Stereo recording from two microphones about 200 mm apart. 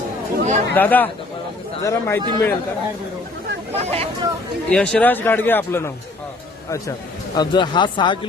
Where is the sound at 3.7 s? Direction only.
30° right (ahead or behind).